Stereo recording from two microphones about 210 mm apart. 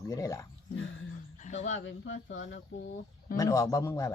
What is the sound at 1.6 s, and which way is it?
Speech, 65° left (ahead or behind).